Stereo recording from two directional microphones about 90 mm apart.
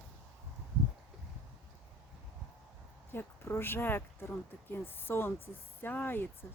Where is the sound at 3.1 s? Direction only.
25° left (ahead or behind).